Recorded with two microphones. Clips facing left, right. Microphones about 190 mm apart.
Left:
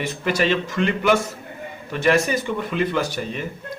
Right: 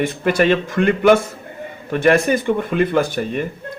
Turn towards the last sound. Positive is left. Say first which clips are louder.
# right 6 dB
turn(degrees=-50)  # may be behind; listen again after turning